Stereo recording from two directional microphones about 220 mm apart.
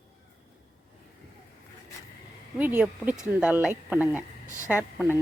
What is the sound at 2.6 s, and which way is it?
A woman's voice, 5° right (ahead or behind).